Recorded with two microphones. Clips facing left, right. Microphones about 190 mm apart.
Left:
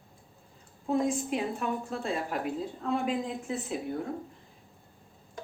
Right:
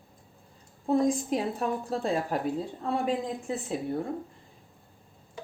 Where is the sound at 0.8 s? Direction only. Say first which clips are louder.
Right 3 dB; 35° right (ahead or behind).